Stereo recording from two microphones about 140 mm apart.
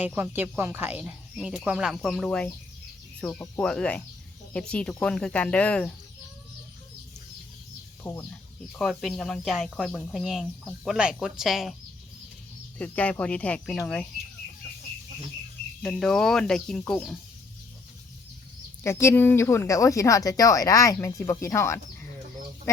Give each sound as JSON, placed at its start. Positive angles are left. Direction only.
{"t": 0.0, "sound": "speech", "side_deg": -10}
{"t": 8.0, "sound": "speech", "side_deg": 15}
{"t": 8.7, "sound": "speech", "side_deg": 0}
{"t": 12.8, "sound": "speech", "side_deg": 10}
{"t": 15.8, "sound": "speech", "side_deg": 5}
{"t": 18.8, "sound": "speech", "side_deg": 20}